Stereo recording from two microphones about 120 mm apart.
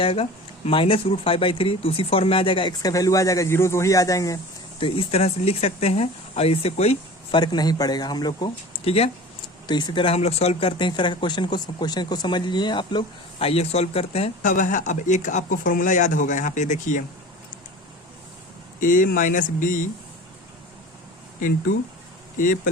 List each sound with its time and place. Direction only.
0.0 s speech: 50° left (ahead or behind)
2.8 s a man's voice: 30° left (ahead or behind)
4.8 s speech: 50° left (ahead or behind)
7.3 s speech: 35° left (ahead or behind); by 9.0 s 55° left (ahead or behind)
9.6 s speech: 35° left (ahead or behind); by 17.0 s 90° left
18.8 s speech: 90° left
22.4 s speech: 90° left